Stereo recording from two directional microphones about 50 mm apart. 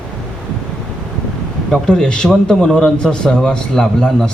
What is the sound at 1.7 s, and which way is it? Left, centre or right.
A man's voice, centre.